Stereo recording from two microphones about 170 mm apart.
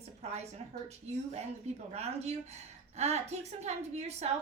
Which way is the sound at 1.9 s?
40° right (ahead or behind).